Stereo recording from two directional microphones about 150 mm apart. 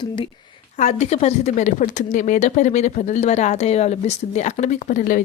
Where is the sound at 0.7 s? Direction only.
50° left (ahead or behind).